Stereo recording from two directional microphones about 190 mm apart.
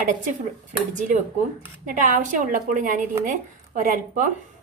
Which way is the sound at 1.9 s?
45° right (ahead or behind).